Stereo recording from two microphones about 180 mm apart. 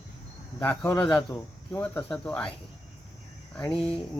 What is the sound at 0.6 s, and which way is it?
Speech, 10° left (ahead or behind).